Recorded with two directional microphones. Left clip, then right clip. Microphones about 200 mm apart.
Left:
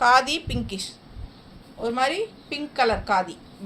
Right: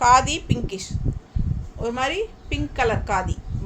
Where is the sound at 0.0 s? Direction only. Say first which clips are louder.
Right 2 dB; 30° right (ahead or behind).